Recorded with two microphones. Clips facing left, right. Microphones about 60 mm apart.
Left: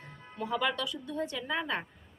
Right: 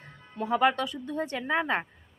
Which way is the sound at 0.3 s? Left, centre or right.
Right.